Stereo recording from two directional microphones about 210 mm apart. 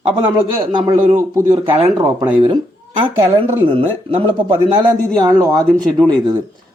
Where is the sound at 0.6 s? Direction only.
25° right (ahead or behind).